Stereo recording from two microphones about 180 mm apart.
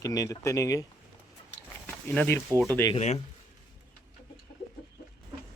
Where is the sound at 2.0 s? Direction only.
10° left (ahead or behind).